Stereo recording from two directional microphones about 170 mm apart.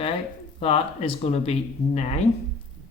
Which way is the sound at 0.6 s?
35° left (ahead or behind).